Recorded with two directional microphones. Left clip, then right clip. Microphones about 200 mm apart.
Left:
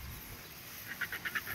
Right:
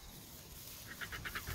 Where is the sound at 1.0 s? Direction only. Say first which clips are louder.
Left 7 dB; 5° right (ahead or behind).